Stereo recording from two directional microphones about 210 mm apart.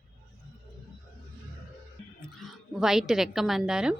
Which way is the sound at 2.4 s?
Centre (ahead or behind).